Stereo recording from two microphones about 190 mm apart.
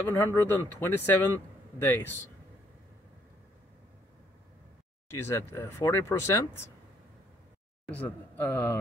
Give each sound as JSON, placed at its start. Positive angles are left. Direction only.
{"t": 0.1, "sound": "speech", "side_deg": 10}
{"t": 5.1, "sound": "speech", "side_deg": 15}
{"t": 7.9, "sound": "speech", "side_deg": 10}